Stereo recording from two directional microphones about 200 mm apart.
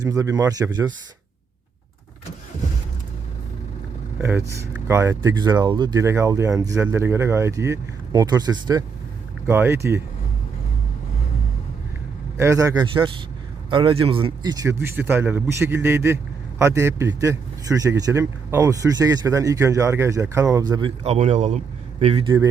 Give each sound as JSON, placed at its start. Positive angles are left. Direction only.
{"t": 0.0, "sound": "speech", "side_deg": -15}
{"t": 4.2, "sound": "speech", "side_deg": -10}
{"t": 12.4, "sound": "a man's voice", "side_deg": -15}
{"t": 21.0, "sound": "a man's voice", "side_deg": -30}